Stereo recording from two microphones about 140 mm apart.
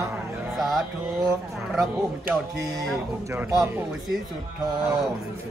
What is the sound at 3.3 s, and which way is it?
Speech, 15° right (ahead or behind).